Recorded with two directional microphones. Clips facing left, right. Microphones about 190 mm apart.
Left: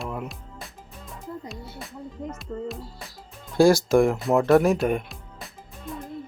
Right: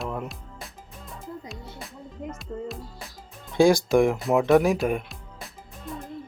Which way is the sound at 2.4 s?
Centre (ahead or behind).